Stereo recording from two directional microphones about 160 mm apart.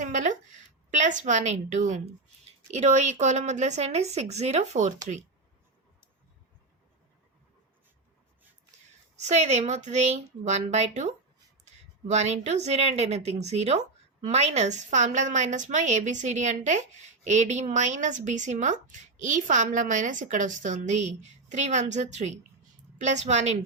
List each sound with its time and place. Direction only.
0.0 s a sound: 50° right (ahead or behind)
0.9 s speech: 50° right (ahead or behind)
9.1 s speech: 45° right (ahead or behind)